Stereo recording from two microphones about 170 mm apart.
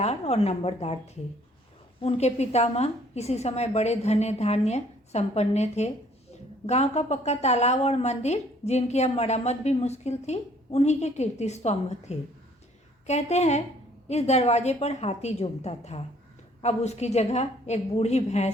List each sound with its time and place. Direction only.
0.0 s a woman's voice: 40° left (ahead or behind)
2.0 s a woman's voice: 40° left (ahead or behind)